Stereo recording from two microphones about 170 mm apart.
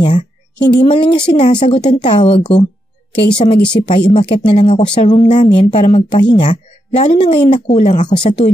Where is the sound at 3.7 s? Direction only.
30° left (ahead or behind).